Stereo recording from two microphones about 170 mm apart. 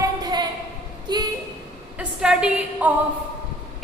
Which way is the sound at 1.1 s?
25° right (ahead or behind).